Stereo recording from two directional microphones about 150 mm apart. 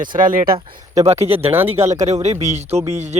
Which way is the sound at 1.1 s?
20° right (ahead or behind).